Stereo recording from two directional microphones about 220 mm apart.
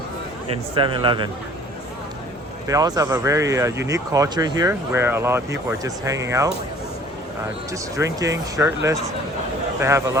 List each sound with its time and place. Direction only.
0.8 s speech: 20° right (ahead or behind)
2.6 s speech: 15° right (ahead or behind)
7.7 s speech: 15° right (ahead or behind)